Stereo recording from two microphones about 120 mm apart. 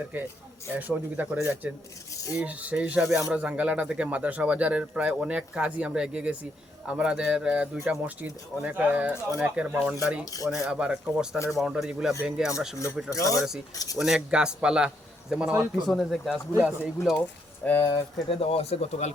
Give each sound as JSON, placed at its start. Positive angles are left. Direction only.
{"t": 0.1, "sound": "speech", "side_deg": -15}
{"t": 13.1, "sound": "speech", "side_deg": 25}
{"t": 14.0, "sound": "speech", "side_deg": -5}
{"t": 17.7, "sound": "speech", "side_deg": 20}
{"t": 18.3, "sound": "speech", "side_deg": 55}